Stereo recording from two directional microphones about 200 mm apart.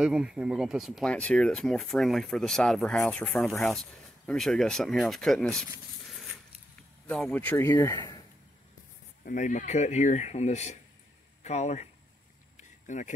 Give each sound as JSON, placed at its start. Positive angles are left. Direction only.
{"t": 0.0, "sound": "speech", "side_deg": -5}
{"t": 7.1, "sound": "speech", "side_deg": 5}
{"t": 9.2, "sound": "speech", "side_deg": 40}
{"t": 12.5, "sound": "a sound", "side_deg": 40}